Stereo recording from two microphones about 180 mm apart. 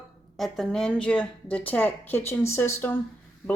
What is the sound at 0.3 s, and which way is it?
A woman's voice, centre (ahead or behind).